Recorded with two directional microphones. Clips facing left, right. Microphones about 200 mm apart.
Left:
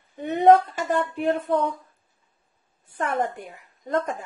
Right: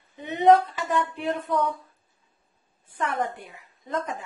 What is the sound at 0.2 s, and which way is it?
Female singing, 50° left (ahead or behind).